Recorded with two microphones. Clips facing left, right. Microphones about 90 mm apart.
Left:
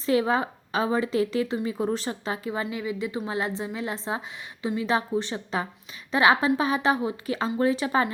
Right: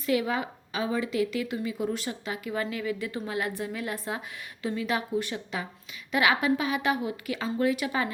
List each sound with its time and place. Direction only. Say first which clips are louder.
0.0 s a woman's voice: left 4 dB; 35° left (ahead or behind)
2.5 s a woman's voice: right 1 dB; 20° left (ahead or behind)